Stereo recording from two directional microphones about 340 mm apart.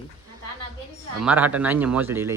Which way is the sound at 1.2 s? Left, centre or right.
Centre.